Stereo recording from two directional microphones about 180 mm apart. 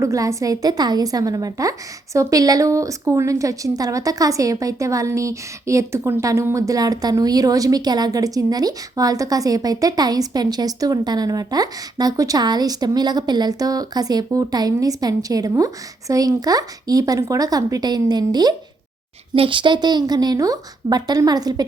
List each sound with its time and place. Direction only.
0.0 s a woman's voice: 15° right (ahead or behind)